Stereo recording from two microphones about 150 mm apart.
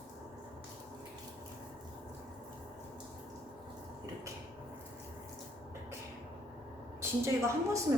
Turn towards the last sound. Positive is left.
turn(degrees=-20)  # may be behind; listen again after turning